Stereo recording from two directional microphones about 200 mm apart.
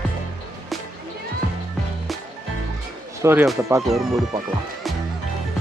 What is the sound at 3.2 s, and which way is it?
Speech, 10° right (ahead or behind).